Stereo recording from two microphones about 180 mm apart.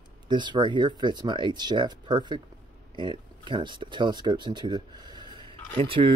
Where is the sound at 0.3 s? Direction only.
25° right (ahead or behind).